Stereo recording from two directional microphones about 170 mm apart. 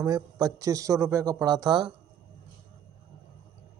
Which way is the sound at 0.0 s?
20° right (ahead or behind).